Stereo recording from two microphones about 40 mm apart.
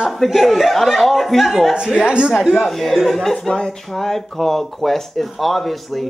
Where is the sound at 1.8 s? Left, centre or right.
Right.